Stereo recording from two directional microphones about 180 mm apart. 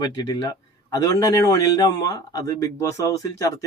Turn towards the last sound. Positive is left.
turn(degrees=15)  # may be behind; listen again after turning